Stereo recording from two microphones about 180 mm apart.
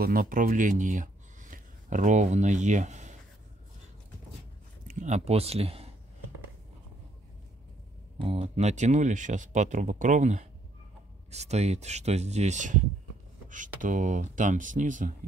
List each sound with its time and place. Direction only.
0.0 s speech: 55° right (ahead or behind)
4.8 s speech: 40° right (ahead or behind)
8.2 s speech: 35° right (ahead or behind)